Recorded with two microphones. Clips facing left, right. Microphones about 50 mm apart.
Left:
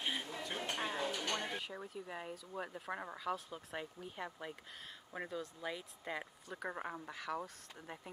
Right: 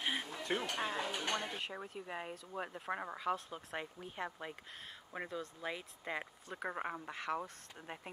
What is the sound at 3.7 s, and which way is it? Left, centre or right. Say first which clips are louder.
Speech: right 2 dB; right.